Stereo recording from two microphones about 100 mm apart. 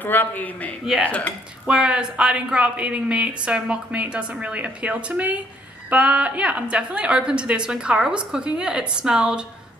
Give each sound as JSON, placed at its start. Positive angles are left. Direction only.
{"t": 0.0, "sound": "a man's voice", "side_deg": 20}
{"t": 1.7, "sound": "a woman's voice", "side_deg": -10}